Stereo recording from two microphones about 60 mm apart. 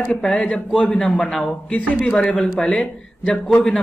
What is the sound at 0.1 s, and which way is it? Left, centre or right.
A man's voice, centre.